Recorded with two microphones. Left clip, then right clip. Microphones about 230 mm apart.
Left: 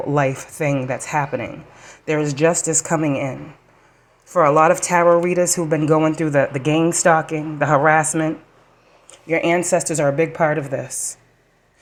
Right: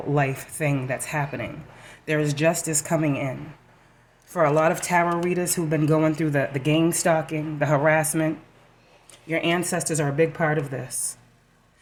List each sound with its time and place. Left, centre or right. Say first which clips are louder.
0.1 s speech: left 4 dB; centre
9.1 s speech: left 6 dB; centre